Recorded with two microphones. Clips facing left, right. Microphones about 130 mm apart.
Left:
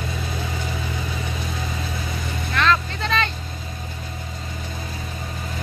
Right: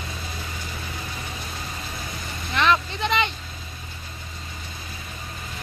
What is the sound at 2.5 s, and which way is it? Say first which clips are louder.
Vehicle: even; 20° right (ahead or behind).